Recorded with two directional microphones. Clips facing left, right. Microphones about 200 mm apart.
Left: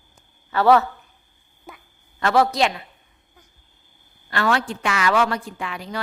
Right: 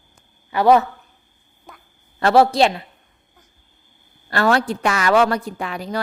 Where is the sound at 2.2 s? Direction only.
30° right (ahead or behind).